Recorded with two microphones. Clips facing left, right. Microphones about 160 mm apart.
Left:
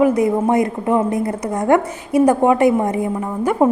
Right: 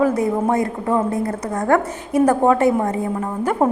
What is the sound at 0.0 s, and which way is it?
A woman's voice, 15° left (ahead or behind).